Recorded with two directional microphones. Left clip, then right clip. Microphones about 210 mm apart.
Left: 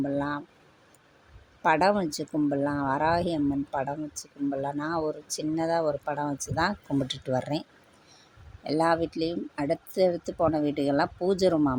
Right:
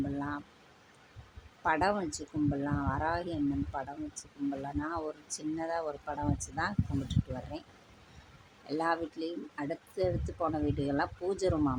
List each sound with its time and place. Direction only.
0.2 s a sound: 25° left (ahead or behind)
1.6 s speech: 25° left (ahead or behind)
8.6 s speech: 25° left (ahead or behind)